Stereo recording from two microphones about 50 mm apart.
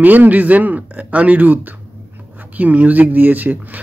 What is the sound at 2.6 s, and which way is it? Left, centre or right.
Speech, right.